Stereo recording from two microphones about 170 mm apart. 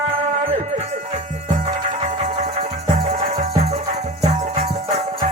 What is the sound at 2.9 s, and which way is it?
Music, 40° right (ahead or behind).